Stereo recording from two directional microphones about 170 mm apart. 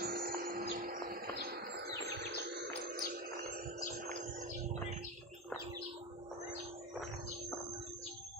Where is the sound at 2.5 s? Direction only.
75° right (ahead or behind); by 4.0 s 55° right (ahead or behind).